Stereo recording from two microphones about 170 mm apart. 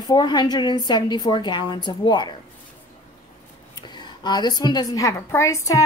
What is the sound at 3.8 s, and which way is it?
A woman's voice, 25° left (ahead or behind).